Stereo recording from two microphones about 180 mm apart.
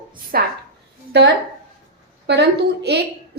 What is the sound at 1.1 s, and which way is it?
A woman's voice, 70° right (ahead or behind).